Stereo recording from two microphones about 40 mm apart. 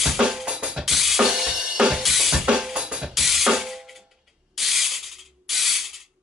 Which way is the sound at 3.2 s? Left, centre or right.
Centre.